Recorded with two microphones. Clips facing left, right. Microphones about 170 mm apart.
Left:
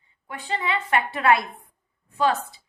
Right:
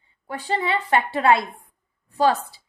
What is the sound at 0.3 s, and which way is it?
A woman's voice, 35° right (ahead or behind).